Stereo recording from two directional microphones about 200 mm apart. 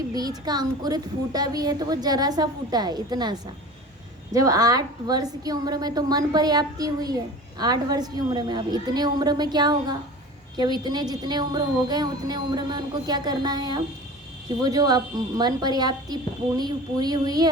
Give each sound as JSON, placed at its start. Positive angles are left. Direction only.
{"t": 0.1, "sound": "a child's voice", "side_deg": -20}